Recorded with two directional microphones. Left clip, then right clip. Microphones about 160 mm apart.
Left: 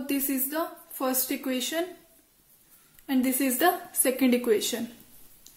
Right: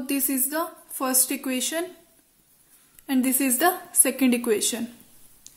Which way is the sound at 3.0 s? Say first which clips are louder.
Right 2 dB; 30° right (ahead or behind).